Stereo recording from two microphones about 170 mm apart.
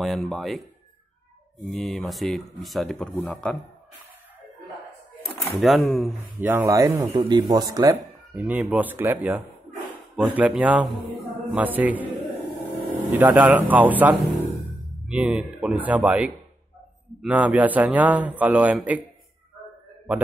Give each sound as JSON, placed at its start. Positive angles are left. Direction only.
{"t": 0.0, "sound": "speech", "side_deg": 0}
{"t": 1.7, "sound": "speech", "side_deg": 0}
{"t": 5.2, "sound": "speech", "side_deg": 0}
{"t": 6.4, "sound": "speech", "side_deg": -15}
{"t": 8.4, "sound": "a man's voice", "side_deg": -10}
{"t": 13.1, "sound": "a man's voice", "side_deg": -10}